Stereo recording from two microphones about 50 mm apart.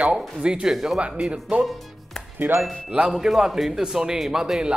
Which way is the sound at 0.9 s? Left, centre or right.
Right.